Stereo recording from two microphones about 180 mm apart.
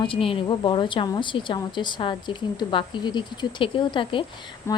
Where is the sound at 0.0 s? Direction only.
30° left (ahead or behind).